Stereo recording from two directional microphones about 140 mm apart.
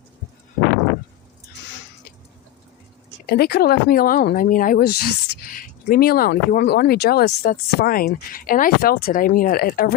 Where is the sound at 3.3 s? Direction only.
90° left.